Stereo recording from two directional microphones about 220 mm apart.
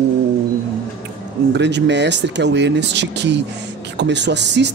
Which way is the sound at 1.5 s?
50° right (ahead or behind).